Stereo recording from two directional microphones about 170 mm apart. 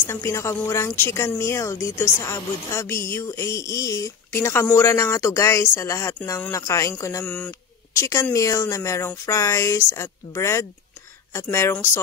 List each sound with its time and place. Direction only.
0.0 s speech: 15° left (ahead or behind)